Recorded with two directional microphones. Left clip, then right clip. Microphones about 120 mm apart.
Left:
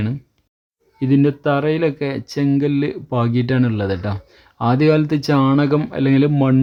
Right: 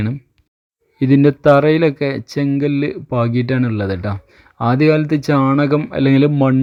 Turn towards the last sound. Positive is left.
turn(degrees=-35)  # may be behind; listen again after turning